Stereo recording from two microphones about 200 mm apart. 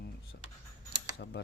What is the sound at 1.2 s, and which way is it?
Speech, 55° left (ahead or behind).